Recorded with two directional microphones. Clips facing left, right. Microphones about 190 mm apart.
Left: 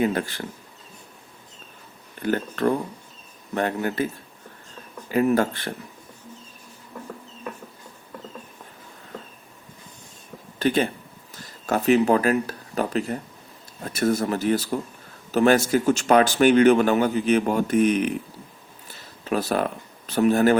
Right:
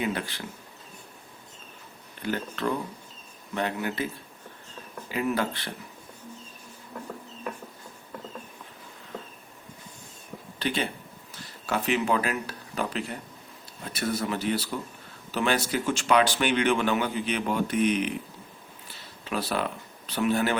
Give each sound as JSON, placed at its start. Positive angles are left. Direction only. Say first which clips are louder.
{"t": 0.0, "sound": "speech", "louder": "left 7 dB", "side_deg": 45}
{"t": 2.2, "sound": "speech", "louder": "left 7 dB", "side_deg": 50}
{"t": 5.1, "sound": "speech", "louder": "left 7 dB", "side_deg": 45}
{"t": 10.6, "sound": "speech", "louder": "left 8 dB", "side_deg": 45}
{"t": 18.9, "sound": "a sound", "louder": "left 8 dB", "side_deg": 45}